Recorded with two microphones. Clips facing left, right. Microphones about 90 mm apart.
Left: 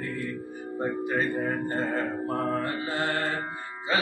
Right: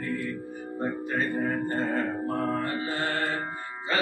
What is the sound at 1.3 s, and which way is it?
Mantra, 5° left (ahead or behind).